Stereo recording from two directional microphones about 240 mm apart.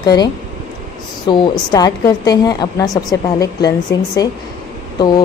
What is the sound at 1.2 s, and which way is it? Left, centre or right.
Speech, centre.